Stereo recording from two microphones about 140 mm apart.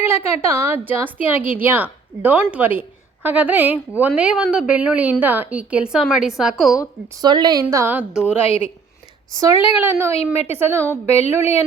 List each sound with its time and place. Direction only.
0.0 s a woman's voice: 20° right (ahead or behind)
7.1 s a woman's voice: 30° right (ahead or behind)
7.7 s a woman's voice: 15° right (ahead or behind)
9.4 s a woman's voice: 20° right (ahead or behind)